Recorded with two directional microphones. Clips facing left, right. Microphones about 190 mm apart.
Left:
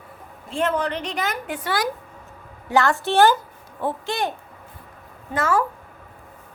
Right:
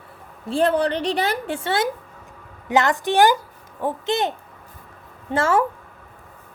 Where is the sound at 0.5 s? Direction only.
35° right (ahead or behind).